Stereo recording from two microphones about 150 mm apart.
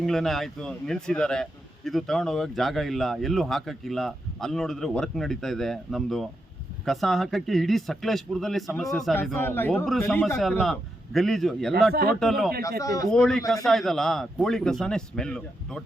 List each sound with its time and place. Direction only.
0.0 s a man's voice: centre (ahead or behind)
9.3 s speech: 15° left (ahead or behind)
10.6 s a man's voice: centre (ahead or behind)
12.8 s a man's voice: 25° left (ahead or behind)
13.1 s a man's voice: 5° left (ahead or behind)